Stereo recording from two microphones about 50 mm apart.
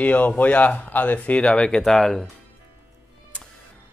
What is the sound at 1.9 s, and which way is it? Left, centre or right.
Speech, centre.